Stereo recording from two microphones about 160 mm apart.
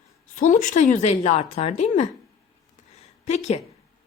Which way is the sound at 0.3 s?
55° left (ahead or behind).